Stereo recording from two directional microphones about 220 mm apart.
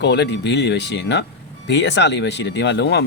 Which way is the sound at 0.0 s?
50° left (ahead or behind).